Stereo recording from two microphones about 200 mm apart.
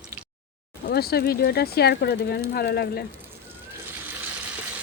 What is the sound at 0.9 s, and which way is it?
Speech, 50° left (ahead or behind).